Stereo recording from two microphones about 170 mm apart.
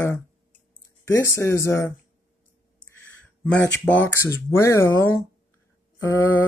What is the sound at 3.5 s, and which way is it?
Speech, 10° left (ahead or behind).